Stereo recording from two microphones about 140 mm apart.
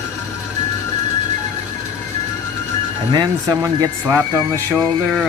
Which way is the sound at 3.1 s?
25° right (ahead or behind).